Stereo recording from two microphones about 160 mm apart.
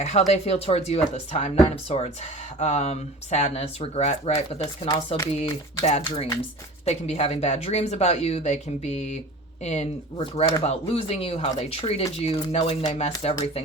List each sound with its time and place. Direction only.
0.0 s speech: 45° left (ahead or behind)
4.6 s speech: 25° left (ahead or behind)
5.4 s speech: 45° left (ahead or behind)